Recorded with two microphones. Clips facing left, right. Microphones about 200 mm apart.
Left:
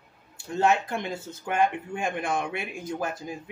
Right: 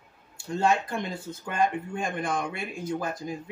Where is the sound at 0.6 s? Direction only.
5° left (ahead or behind).